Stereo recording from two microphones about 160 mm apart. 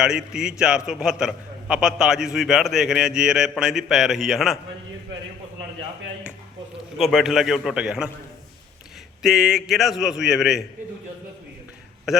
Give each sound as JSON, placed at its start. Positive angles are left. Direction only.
{"t": 0.0, "sound": "a man's voice", "side_deg": -5}
{"t": 7.0, "sound": "a man's voice", "side_deg": 0}
{"t": 9.2, "sound": "a man's voice", "side_deg": 0}
{"t": 12.1, "sound": "a man's voice", "side_deg": -5}